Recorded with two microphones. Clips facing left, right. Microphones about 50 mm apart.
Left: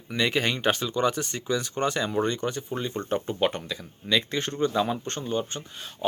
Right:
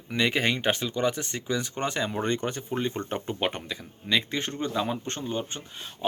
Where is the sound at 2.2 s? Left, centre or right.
Right.